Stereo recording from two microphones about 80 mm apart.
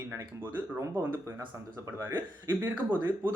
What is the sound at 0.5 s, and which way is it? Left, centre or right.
A man's voice, right.